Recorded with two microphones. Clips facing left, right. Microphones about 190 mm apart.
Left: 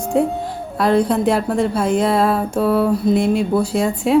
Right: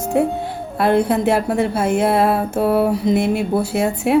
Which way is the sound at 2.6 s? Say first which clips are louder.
Left 1 dB; 60° right (ahead or behind).